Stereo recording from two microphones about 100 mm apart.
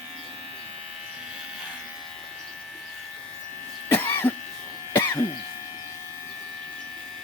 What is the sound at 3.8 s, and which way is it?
Cough, 20° left (ahead or behind).